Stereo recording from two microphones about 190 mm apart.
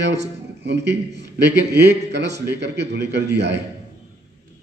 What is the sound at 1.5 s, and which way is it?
A man's voice, 65° right (ahead or behind).